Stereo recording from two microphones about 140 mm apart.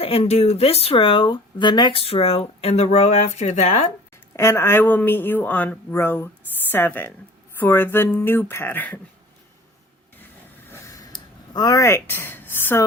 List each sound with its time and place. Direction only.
0.0 s speech: 45° left (ahead or behind)
4.4 s speech: 20° left (ahead or behind)
10.7 s a sound: 20° left (ahead or behind)
11.5 s speech: 25° left (ahead or behind)